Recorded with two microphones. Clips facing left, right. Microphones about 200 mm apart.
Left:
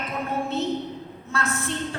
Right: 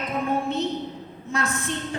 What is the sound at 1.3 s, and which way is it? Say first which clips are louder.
Speech: right 1 dB; 15° right (ahead or behind).